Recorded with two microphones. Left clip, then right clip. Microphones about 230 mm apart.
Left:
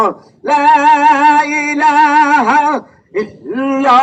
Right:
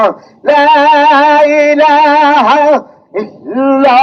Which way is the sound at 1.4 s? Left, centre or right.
Left.